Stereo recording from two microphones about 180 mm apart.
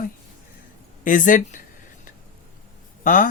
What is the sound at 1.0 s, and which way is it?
Speech, 50° left (ahead or behind).